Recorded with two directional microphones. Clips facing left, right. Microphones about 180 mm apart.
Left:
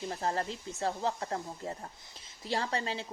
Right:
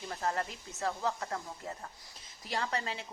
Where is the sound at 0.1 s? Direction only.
30° left (ahead or behind).